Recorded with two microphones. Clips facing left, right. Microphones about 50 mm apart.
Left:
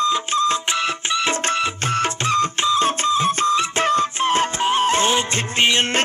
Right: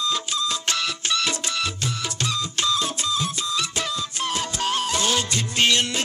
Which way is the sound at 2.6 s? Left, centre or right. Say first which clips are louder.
Left 7 dB; left.